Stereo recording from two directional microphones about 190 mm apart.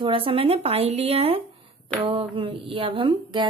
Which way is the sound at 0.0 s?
30° right (ahead or behind).